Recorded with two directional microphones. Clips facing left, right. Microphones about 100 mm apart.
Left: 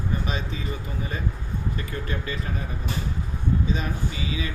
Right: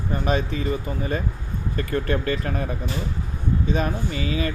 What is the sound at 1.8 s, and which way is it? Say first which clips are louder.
Speech: right 8 dB; 55° right (ahead or behind).